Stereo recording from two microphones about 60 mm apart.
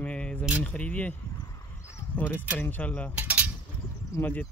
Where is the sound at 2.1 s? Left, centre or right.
Left.